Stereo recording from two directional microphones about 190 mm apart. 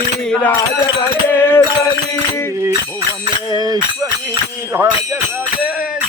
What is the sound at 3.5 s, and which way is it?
Speech, 20° right (ahead or behind).